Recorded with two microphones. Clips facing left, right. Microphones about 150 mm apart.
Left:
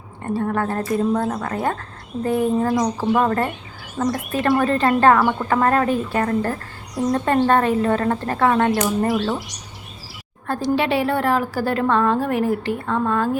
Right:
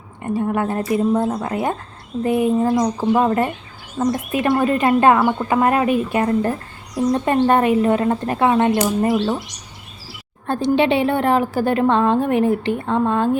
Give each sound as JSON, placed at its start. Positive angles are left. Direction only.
{"t": 0.2, "sound": "a woman's voice", "side_deg": -15}
{"t": 10.4, "sound": "a woman's voice", "side_deg": -25}